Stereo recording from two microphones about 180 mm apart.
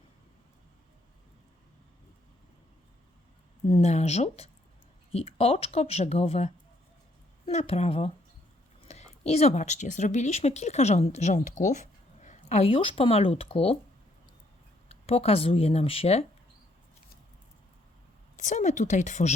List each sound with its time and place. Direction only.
3.7 s speech: 35° left (ahead or behind)
14.8 s speech: 35° left (ahead or behind)
18.3 s a woman's voice: 40° left (ahead or behind)